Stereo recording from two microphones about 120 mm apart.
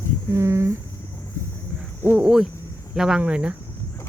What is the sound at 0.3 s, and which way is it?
Speech, 25° right (ahead or behind).